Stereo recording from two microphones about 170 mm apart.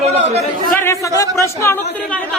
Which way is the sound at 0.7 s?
15° left (ahead or behind).